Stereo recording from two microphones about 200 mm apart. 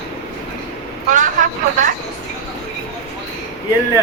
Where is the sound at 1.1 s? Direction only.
40° right (ahead or behind).